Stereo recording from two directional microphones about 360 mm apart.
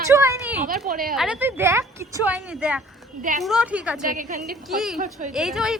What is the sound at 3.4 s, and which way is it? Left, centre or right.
Speech, centre.